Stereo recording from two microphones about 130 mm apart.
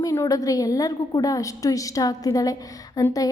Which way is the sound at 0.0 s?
25° left (ahead or behind).